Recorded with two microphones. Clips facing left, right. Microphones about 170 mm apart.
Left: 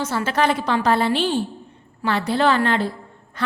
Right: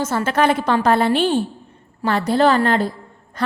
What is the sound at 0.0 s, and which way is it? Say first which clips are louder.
A woman's voice: right 3 dB; 45° right (ahead or behind).